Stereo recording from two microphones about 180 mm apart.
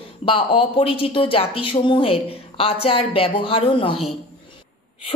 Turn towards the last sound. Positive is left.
turn(degrees=30)  # may be behind; listen again after turning